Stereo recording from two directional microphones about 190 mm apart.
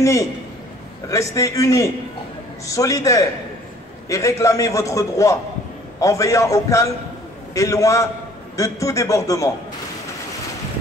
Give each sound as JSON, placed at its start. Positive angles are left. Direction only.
{"t": 0.0, "sound": "a man's voice", "side_deg": 15}